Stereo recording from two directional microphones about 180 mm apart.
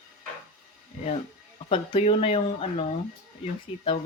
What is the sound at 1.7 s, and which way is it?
Speech, 30° left (ahead or behind).